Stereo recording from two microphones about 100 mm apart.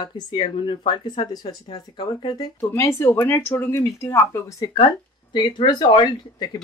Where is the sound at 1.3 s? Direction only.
45° left (ahead or behind).